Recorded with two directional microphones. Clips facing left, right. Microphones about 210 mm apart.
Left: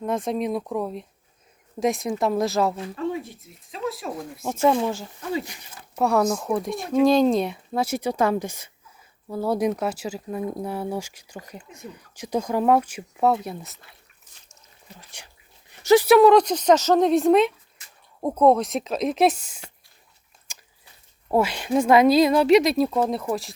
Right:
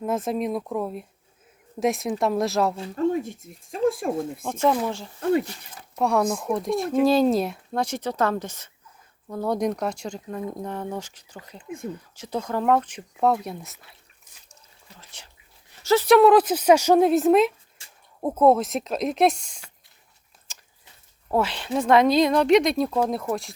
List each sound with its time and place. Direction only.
0.0 s a woman's voice: centre (ahead or behind)
2.9 s speech: 45° right (ahead or behind)
4.4 s speech: 10° left (ahead or behind)
6.0 s a woman's voice: centre (ahead or behind)
14.9 s whispering: 15° left (ahead or behind)
15.8 s speech: 15° left (ahead or behind)
16.0 s a woman's voice: centre (ahead or behind)
17.8 s a sound: 30° right (ahead or behind)
18.2 s a woman's voice: 5° right (ahead or behind)
20.5 s a sound: 10° left (ahead or behind)
21.2 s a woman's voice: 10° left (ahead or behind)